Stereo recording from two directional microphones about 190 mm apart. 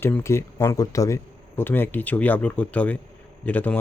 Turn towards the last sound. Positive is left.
turn(degrees=10)  # may be behind; listen again after turning